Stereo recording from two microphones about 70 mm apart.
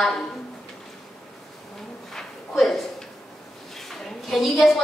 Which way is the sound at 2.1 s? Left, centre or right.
Centre.